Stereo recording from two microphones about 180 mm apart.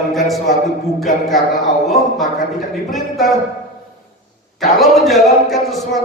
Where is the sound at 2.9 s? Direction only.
Centre (ahead or behind).